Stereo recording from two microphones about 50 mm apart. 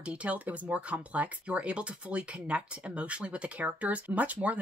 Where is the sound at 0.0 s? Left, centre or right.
Right.